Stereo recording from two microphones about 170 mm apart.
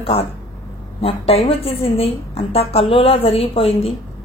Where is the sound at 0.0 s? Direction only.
35° left (ahead or behind).